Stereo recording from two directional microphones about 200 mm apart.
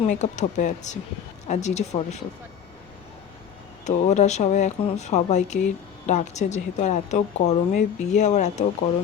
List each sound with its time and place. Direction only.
0.0 s a woman's voice: 35° left (ahead or behind)
3.8 s a woman's voice: 35° left (ahead or behind)